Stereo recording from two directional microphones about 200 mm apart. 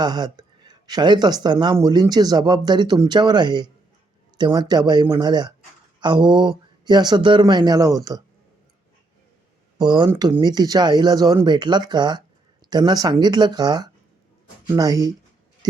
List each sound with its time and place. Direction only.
0.0 s speech: 20° right (ahead or behind)
9.7 s speech: 20° right (ahead or behind)